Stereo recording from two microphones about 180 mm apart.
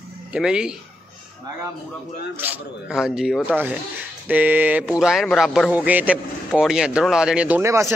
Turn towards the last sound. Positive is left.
turn(degrees=-15)  # may be behind; listen again after turning